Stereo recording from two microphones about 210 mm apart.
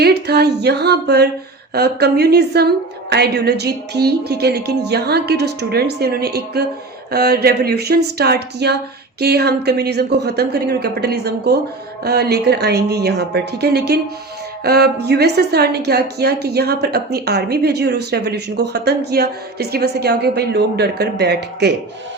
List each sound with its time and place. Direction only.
0.0 s speech: 50° right (ahead or behind)